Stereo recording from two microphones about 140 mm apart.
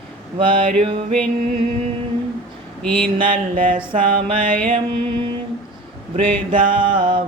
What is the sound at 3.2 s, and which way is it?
Mantra, 80° right.